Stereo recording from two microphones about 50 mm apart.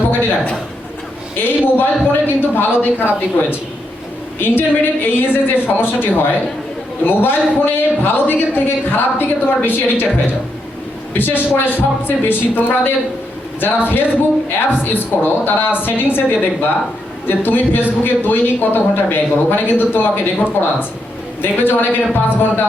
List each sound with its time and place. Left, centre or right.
0.1 s a sound: left
1.4 s a woman's voice: left
4.4 s a woman's voice: left
11.1 s a woman's voice: left